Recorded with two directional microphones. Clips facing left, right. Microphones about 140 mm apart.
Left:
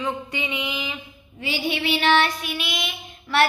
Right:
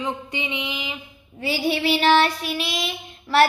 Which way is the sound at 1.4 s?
40° right (ahead or behind).